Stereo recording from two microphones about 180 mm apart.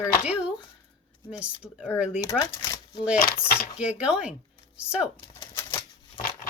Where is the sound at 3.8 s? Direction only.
5° right (ahead or behind).